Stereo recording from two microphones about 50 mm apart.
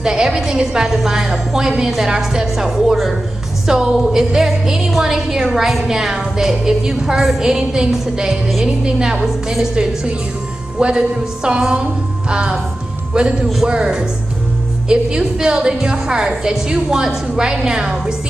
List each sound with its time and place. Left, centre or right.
0.0 s a woman's voice: centre
12.3 s music: centre
13.1 s a woman's voice: centre